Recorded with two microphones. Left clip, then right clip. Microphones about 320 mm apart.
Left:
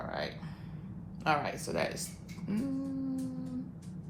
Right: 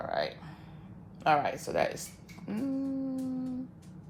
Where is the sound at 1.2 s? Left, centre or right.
Right.